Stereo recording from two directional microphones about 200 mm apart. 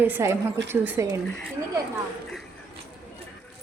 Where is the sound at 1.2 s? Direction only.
5° left (ahead or behind).